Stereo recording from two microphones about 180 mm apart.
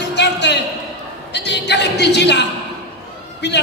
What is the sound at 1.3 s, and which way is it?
A woman's voice, 70° left (ahead or behind).